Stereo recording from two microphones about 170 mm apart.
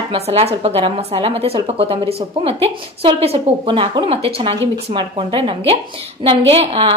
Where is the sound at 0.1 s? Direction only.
35° right (ahead or behind).